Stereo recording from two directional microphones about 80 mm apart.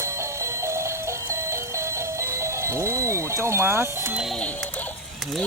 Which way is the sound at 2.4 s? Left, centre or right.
Right.